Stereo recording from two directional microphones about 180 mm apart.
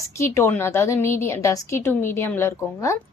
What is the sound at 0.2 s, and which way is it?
Speech, 15° left (ahead or behind).